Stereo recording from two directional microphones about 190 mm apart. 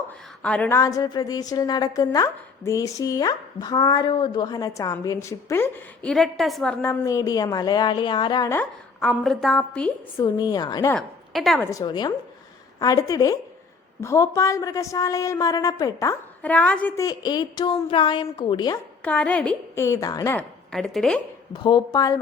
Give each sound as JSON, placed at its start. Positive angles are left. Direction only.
{"t": 0.4, "sound": "a woman's voice", "side_deg": 5}
{"t": 0.8, "sound": "a woman's voice", "side_deg": 20}
{"t": 6.8, "sound": "a woman's voice", "side_deg": 15}
{"t": 9.0, "sound": "a woman's voice", "side_deg": 5}
{"t": 10.2, "sound": "a woman's voice", "side_deg": 20}
{"t": 10.9, "sound": "a woman's voice", "side_deg": 0}
{"t": 11.6, "sound": "a woman's voice", "side_deg": 15}
{"t": 16.4, "sound": "a woman's voice", "side_deg": 5}
{"t": 17.1, "sound": "a woman's voice", "side_deg": 20}
{"t": 19.0, "sound": "a woman's voice", "side_deg": 10}
{"t": 20.3, "sound": "a woman's voice", "side_deg": 5}
{"t": 21.5, "sound": "a woman's voice", "side_deg": 20}